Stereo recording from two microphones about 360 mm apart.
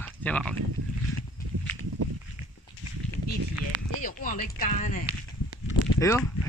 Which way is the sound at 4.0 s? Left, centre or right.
Left.